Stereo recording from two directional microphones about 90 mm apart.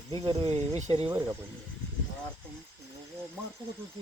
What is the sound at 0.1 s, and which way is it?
Speech, 65° right (ahead or behind).